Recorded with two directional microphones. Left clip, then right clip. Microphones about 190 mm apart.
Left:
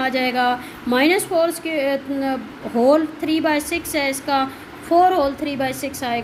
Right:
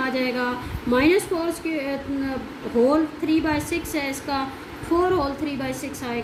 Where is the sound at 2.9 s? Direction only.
50° left (ahead or behind).